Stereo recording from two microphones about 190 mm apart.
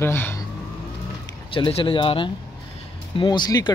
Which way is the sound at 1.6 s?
30° left (ahead or behind).